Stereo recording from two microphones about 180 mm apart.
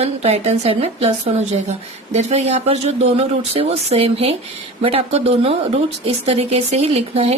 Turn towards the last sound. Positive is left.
turn(degrees=-35)  # may be behind; listen again after turning